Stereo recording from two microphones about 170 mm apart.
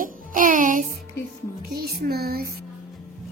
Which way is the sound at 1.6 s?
65° right (ahead or behind).